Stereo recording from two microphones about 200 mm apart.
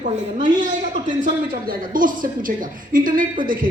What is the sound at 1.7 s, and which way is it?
Speech, 45° right (ahead or behind).